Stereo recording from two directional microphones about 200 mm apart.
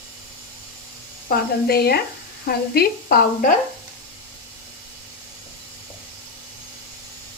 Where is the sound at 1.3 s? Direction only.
50° left (ahead or behind).